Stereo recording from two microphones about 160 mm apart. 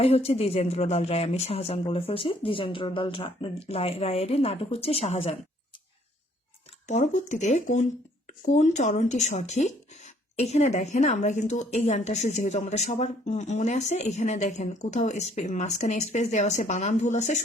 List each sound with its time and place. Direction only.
0.0 s speech: 40° left (ahead or behind)
6.8 s a woman's voice: 45° left (ahead or behind)